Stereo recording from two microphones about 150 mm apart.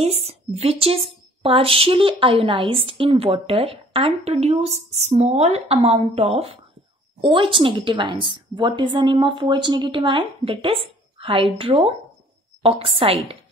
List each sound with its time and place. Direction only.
0.0 s a woman's voice: 40° right (ahead or behind)